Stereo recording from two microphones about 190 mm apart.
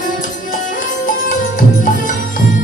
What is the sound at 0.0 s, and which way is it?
Music, 45° left (ahead or behind).